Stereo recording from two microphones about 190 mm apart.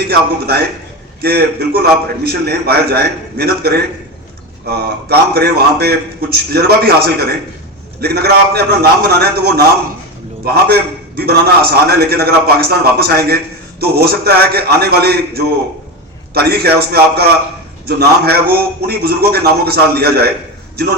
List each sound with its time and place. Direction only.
0.1 s a man's voice: 55° right (ahead or behind)